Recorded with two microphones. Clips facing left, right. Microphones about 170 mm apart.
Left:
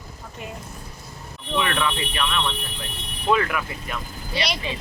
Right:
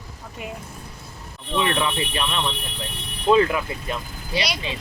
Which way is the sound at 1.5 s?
25° right (ahead or behind).